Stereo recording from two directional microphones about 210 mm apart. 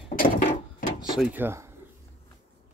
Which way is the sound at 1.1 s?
10° right (ahead or behind).